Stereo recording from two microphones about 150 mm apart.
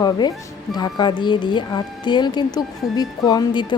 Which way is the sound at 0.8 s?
30° left (ahead or behind).